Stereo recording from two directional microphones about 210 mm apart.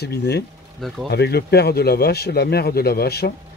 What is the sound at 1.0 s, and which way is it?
Speech, 50° left (ahead or behind).